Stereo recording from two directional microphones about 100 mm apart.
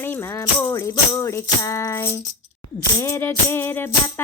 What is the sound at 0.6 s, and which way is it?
Music, 30° left (ahead or behind).